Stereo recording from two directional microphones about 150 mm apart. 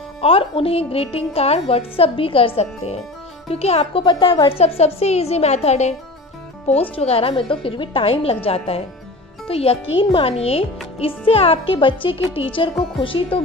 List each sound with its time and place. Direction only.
0.2 s a woman's voice: 40° left (ahead or behind)